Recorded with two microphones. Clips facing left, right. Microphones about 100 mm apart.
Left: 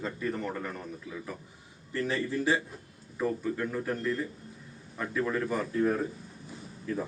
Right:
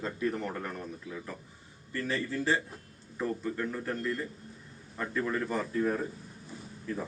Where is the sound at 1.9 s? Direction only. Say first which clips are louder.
Left 3 dB; 20° left (ahead or behind).